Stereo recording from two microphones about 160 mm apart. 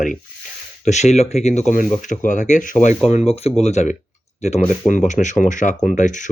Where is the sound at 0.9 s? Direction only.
45° left (ahead or behind).